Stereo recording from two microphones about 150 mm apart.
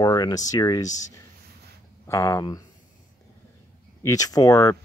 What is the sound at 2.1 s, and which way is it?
Speech, 20° left (ahead or behind).